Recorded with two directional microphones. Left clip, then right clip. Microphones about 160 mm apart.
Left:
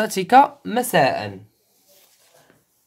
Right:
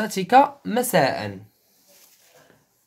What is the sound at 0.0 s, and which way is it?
Speech, 20° left (ahead or behind).